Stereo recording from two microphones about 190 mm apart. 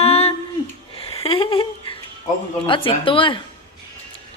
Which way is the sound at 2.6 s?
25° left (ahead or behind).